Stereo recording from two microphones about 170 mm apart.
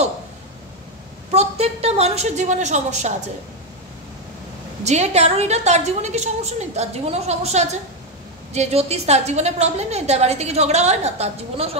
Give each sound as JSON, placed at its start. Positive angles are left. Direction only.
{"t": 1.3, "sound": "a woman's voice", "side_deg": -35}
{"t": 4.8, "sound": "a woman's voice", "side_deg": -40}